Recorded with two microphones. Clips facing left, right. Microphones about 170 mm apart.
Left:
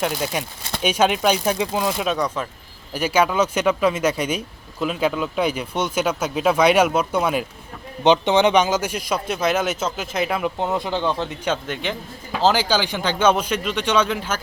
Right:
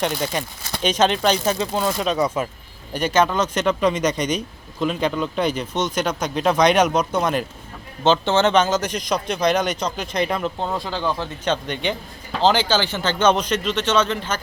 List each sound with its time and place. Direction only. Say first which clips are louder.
0.0 s speech: even; 5° left (ahead or behind)
2.2 s speech: right 3 dB; 10° right (ahead or behind)
2.9 s speech: even; 10° left (ahead or behind)
10.6 s speech: left 2 dB; 20° left (ahead or behind)
11.4 s speech: right 3 dB; 5° left (ahead or behind)